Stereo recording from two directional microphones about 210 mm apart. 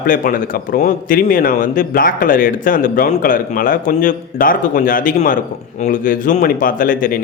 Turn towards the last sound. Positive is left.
turn(degrees=40)  # may be behind; listen again after turning